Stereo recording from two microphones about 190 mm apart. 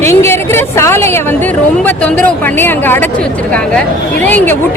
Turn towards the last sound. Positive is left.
turn(degrees=10)  # may be behind; listen again after turning